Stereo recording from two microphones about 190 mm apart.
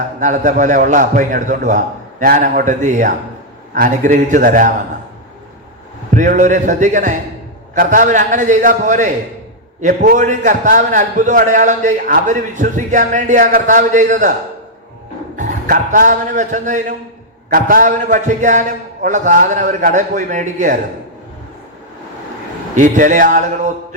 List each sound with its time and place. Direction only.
0.2 s a man's voice: 40° right (ahead or behind)
6.1 s a man's voice: 40° right (ahead or behind)
15.4 s a man's voice: 40° right (ahead or behind)
22.7 s a man's voice: 40° right (ahead or behind)